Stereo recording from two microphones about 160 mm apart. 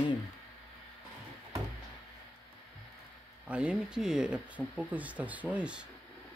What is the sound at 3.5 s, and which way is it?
Speech, 5° right (ahead or behind).